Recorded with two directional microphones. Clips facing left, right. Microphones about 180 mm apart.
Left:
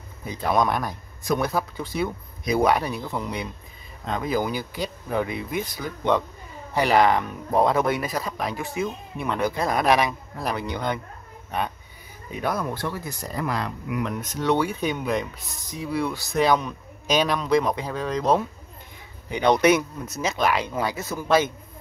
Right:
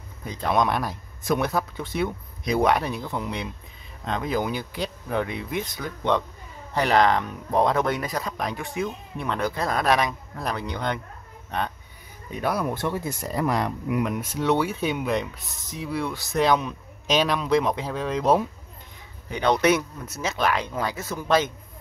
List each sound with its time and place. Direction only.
0.3 s speech: 5° left (ahead or behind)
12.4 s speech: 10° right (ahead or behind)
12.7 s speech: 25° right (ahead or behind)
14.0 s speech: 10° right (ahead or behind)
19.4 s speech: 15° left (ahead or behind)